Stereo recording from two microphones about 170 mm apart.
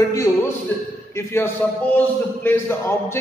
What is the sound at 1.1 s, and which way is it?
A man's voice, 15° left (ahead or behind).